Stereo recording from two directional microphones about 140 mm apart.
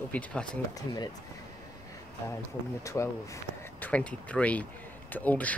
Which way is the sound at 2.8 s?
20° left (ahead or behind).